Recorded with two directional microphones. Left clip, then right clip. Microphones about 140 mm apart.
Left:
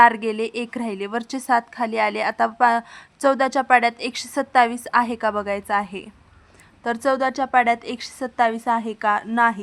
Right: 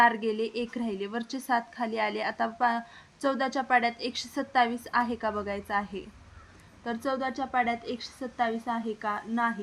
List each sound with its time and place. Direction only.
0.0 s a woman's voice: 35° left (ahead or behind)
6.8 s a woman's voice: 50° left (ahead or behind)